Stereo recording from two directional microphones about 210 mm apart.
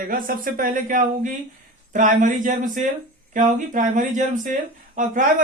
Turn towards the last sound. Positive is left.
turn(degrees=-40)  # may be behind; listen again after turning